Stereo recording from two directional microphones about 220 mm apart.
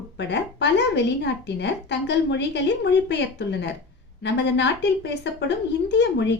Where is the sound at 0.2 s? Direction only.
50° left (ahead or behind).